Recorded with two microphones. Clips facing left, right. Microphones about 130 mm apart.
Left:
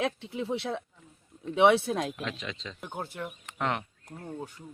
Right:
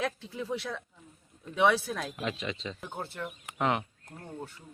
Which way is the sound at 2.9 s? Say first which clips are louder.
Left 4 dB; 10° left (ahead or behind).